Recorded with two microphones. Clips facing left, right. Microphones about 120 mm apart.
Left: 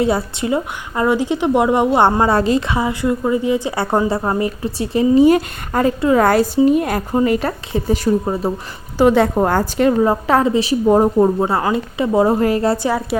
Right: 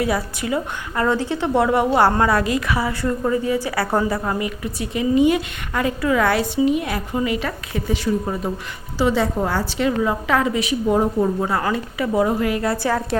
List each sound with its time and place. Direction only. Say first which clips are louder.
0.0 s a woman's voice: left 4 dB; 25° left (ahead or behind)
1.0 s a woman's voice: left 5 dB; 15° left (ahead or behind); by 8.5 s 35° left (ahead or behind)
9.0 s a woman's voice: left 6 dB; 55° left (ahead or behind)
11.3 s a woman's voice: left 4 dB; 25° left (ahead or behind)
12.7 s a woman's voice: left 3 dB; 20° left (ahead or behind)